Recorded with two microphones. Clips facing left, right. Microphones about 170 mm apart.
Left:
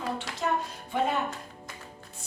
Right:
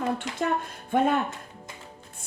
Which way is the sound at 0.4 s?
55° right (ahead or behind).